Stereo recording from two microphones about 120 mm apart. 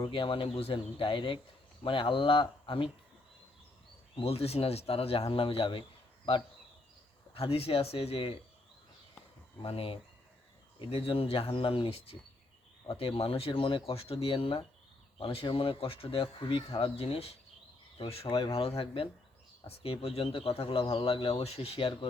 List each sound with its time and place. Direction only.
0.0 s speech: 45° left (ahead or behind)
4.1 s speech: 55° left (ahead or behind)
7.3 s speech: 50° left (ahead or behind)
9.6 s speech: 50° left (ahead or behind)